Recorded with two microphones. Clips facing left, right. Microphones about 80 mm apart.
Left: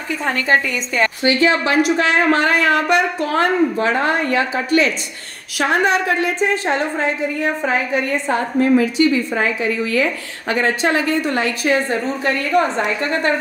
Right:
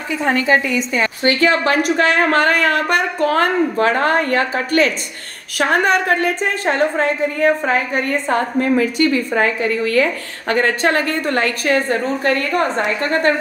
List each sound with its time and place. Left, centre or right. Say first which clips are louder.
0.4 s a woman's voice: even; left
1.2 s a woman's voice: right 2 dB; right